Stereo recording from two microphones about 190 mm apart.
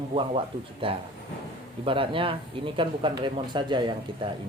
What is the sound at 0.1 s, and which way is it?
Speech, 30° right (ahead or behind).